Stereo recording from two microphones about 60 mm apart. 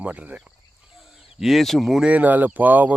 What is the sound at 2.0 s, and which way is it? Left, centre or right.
Speech, right.